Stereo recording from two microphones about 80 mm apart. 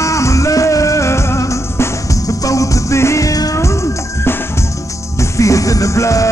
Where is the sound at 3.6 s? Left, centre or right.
Left.